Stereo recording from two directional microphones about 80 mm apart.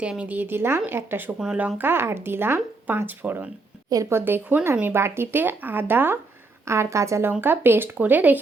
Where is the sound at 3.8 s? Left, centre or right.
Right.